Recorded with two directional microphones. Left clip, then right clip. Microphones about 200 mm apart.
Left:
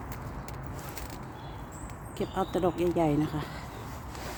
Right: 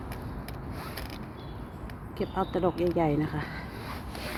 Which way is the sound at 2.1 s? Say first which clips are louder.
Right 1 dB; 15° left (ahead or behind).